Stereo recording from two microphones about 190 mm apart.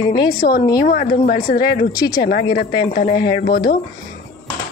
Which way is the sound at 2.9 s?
45° left (ahead or behind).